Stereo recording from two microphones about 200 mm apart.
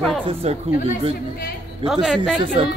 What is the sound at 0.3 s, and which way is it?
Speech, 30° right (ahead or behind).